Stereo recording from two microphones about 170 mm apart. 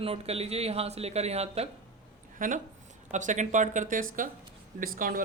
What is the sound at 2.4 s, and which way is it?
Speech, 50° right (ahead or behind).